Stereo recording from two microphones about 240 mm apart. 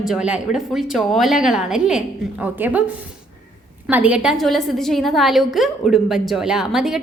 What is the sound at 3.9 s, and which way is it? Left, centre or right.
A woman's voice, centre.